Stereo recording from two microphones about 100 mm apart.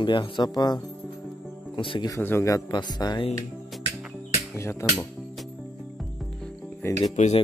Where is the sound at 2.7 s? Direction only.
45° left (ahead or behind).